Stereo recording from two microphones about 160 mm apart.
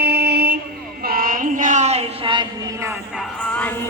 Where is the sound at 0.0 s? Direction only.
90° right.